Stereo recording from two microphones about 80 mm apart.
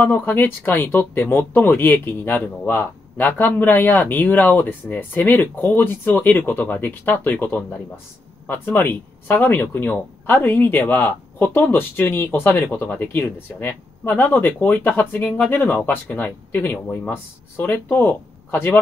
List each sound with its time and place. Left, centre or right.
0.0 s speech: left